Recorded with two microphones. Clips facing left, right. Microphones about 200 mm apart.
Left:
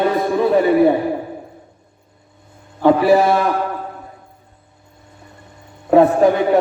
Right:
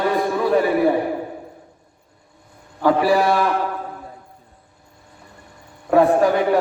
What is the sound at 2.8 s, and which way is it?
Speech, 20° left (ahead or behind).